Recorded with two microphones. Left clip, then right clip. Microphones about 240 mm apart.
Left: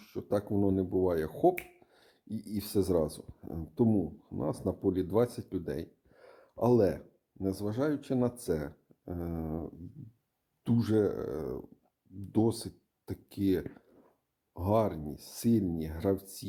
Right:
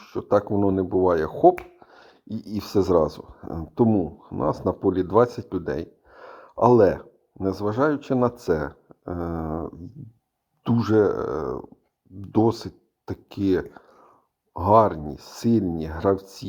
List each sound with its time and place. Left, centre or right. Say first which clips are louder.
0.0 s speech: right 11 dB; centre